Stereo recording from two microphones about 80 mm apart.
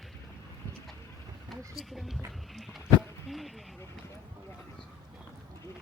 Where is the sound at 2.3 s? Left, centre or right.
Centre.